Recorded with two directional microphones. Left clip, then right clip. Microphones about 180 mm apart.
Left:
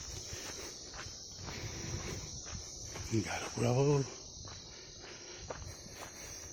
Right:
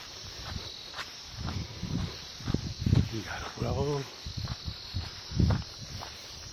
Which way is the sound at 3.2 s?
60° left (ahead or behind).